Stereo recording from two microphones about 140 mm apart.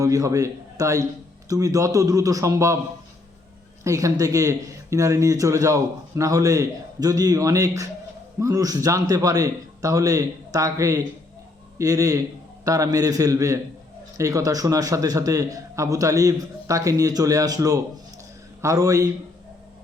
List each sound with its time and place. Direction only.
0.0 s speech: 25° right (ahead or behind)
3.8 s speech: 25° right (ahead or behind)